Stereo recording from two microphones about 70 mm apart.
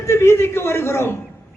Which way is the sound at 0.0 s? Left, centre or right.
Left.